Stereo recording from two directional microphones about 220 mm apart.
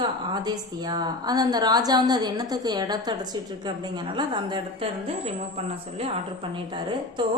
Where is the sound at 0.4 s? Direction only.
20° right (ahead or behind).